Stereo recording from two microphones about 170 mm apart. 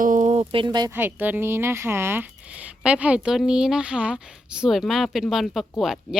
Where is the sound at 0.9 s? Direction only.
10° right (ahead or behind).